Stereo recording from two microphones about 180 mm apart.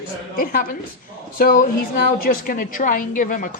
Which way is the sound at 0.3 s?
50° left (ahead or behind).